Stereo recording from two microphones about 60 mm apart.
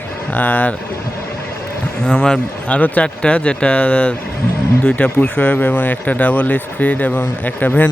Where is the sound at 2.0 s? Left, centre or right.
Centre.